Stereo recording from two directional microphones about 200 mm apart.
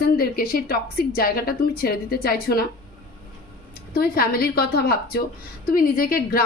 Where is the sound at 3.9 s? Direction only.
50° left (ahead or behind).